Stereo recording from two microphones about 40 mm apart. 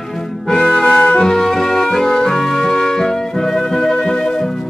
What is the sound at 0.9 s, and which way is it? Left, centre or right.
Music, left.